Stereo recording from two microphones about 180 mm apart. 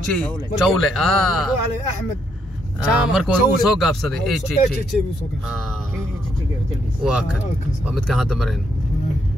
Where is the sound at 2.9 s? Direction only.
5° right (ahead or behind).